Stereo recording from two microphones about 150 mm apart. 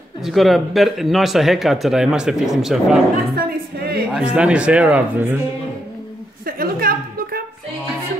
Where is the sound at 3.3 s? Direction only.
90° right.